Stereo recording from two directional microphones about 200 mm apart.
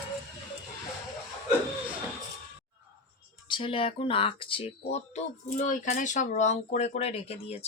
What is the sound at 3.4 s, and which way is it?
Speech, 25° left (ahead or behind).